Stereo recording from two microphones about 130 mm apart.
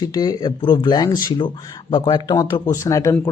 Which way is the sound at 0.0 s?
30° left (ahead or behind).